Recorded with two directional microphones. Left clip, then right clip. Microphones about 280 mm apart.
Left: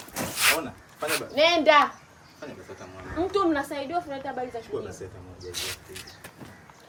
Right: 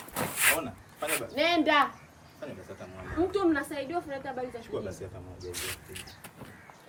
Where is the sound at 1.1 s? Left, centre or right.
Centre.